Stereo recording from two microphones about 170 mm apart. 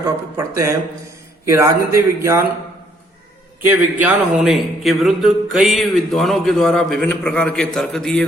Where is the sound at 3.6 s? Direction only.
10° right (ahead or behind).